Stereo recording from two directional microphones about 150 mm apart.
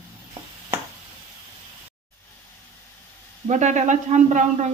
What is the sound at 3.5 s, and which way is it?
Speech, 55° right (ahead or behind).